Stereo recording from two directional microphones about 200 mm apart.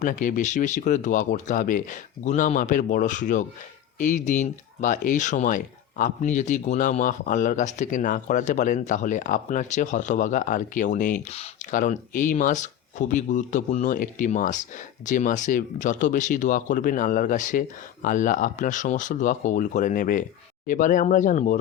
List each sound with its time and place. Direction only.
0.0 s speech: 40° left (ahead or behind)